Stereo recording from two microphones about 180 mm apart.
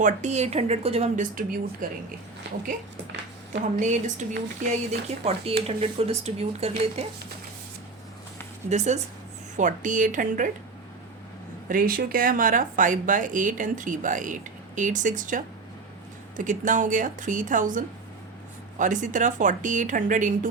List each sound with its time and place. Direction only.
0.0 s speech: 40° right (ahead or behind)
3.6 s speech: 45° right (ahead or behind)
8.7 s speech: 40° right (ahead or behind)
11.7 s speech: 55° right (ahead or behind)